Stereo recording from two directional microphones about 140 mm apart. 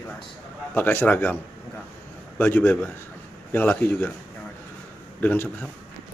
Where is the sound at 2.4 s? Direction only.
15° left (ahead or behind).